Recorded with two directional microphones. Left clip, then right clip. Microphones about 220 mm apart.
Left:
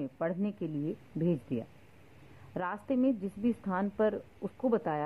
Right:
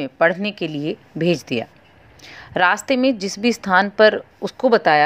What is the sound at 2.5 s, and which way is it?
A woman's voice, 20° right (ahead or behind).